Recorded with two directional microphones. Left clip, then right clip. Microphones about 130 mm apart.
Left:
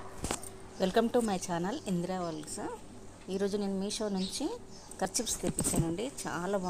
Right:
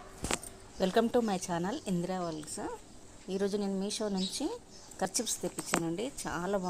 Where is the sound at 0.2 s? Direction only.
Centre (ahead or behind).